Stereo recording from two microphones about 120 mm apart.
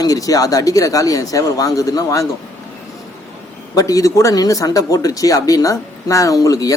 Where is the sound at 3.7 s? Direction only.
30° left (ahead or behind).